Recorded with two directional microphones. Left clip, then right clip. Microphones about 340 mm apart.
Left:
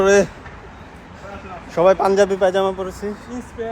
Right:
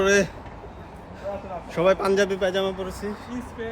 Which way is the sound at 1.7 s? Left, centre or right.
Centre.